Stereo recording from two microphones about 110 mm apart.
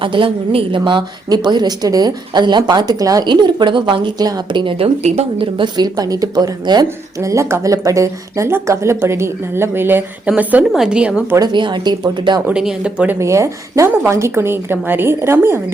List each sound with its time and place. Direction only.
0.0 s a woman's voice: 50° right (ahead or behind); by 11.2 s 10° right (ahead or behind)
11.3 s speech: 40° right (ahead or behind)
12.5 s speech: 10° right (ahead or behind)
13.1 s a woman's voice: 25° right (ahead or behind)